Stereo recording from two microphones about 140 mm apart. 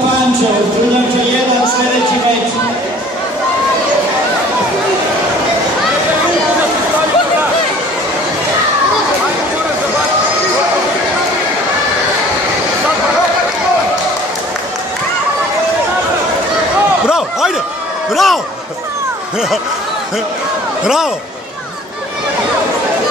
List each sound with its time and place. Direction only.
18.1 s basketball bounce: centre (ahead or behind)
20.8 s speech: 5° right (ahead or behind)